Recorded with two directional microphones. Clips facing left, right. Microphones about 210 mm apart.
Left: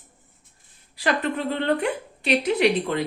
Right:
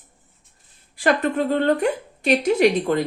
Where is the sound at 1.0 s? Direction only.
50° right (ahead or behind).